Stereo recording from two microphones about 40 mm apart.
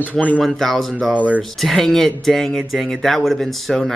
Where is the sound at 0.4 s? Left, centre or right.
Centre.